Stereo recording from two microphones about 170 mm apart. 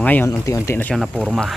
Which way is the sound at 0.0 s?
10° left (ahead or behind).